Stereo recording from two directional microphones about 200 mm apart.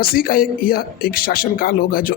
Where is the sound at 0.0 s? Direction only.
45° left (ahead or behind).